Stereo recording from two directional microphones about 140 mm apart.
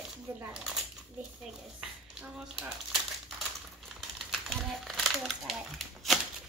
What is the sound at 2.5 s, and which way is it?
Crumpling, centre (ahead or behind).